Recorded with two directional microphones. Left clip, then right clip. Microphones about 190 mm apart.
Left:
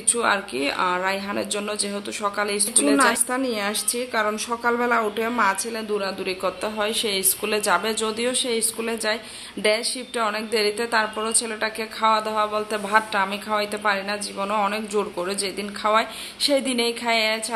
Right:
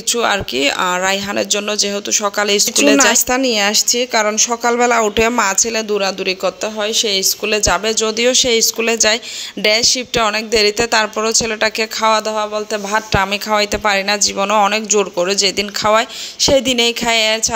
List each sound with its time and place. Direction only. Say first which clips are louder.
0.1 s speech: right 6 dB; 35° right (ahead or behind)